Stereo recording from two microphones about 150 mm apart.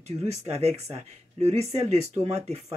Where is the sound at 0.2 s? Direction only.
45° right (ahead or behind).